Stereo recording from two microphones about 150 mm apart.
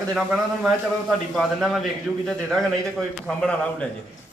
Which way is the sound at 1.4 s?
Centre (ahead or behind).